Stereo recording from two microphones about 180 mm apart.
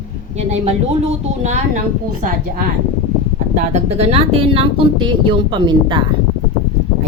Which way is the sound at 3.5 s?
40° right (ahead or behind).